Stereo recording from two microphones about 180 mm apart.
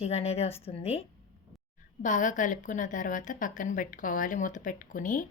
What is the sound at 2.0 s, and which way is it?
A woman's voice, 45° left (ahead or behind).